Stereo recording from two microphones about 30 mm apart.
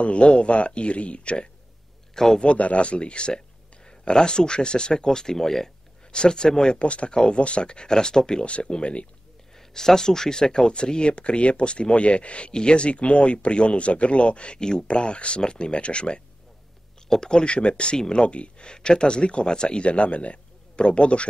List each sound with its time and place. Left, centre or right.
0.0 s speech: left; by 5.7 s centre
6.1 s speech: left
6.8 s speech: left
9.6 s speech: centre
10.9 s speech: left
14.6 s speech: left
14.9 s speech: left
17.2 s speech: left
17.9 s speech: left
18.2 s speech: left
18.7 s speech: left
19.8 s speech: left